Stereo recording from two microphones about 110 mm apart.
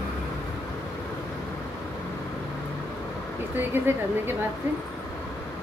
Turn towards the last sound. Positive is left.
turn(degrees=-20)  # may be behind; listen again after turning